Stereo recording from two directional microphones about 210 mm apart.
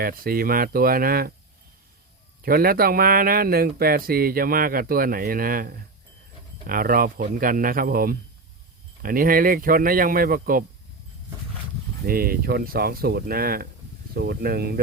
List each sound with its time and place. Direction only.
0.0 s a man's voice: 45° right (ahead or behind)
2.4 s a man's voice: 45° right (ahead or behind)
12.0 s a man's voice: 45° right (ahead or behind)